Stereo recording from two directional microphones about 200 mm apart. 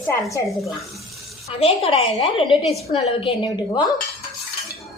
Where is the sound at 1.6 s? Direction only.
30° left (ahead or behind).